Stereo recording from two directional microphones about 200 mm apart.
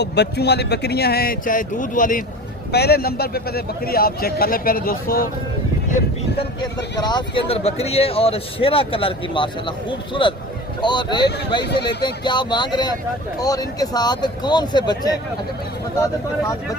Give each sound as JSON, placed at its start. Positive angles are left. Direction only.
{"t": 0.0, "sound": "speech", "side_deg": 55}
{"t": 2.7, "sound": "speech", "side_deg": 55}
{"t": 7.0, "sound": "speech", "side_deg": 20}
{"t": 10.8, "sound": "speech", "side_deg": 20}
{"t": 11.6, "sound": "speech", "side_deg": 55}
{"t": 12.0, "sound": "speech", "side_deg": 20}